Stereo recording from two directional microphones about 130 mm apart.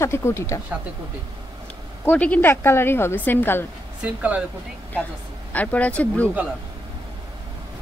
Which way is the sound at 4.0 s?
10° right (ahead or behind).